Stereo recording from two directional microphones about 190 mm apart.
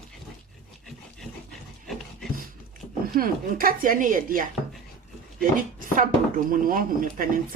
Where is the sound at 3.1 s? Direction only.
50° right (ahead or behind).